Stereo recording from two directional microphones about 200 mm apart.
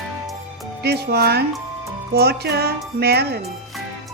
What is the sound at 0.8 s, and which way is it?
Speech, 55° right (ahead or behind).